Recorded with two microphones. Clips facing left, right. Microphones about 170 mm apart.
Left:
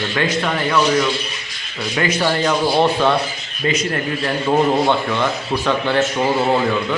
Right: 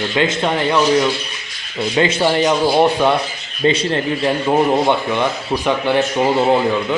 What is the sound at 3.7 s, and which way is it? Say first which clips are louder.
Speech: right 3 dB; 25° right (ahead or behind).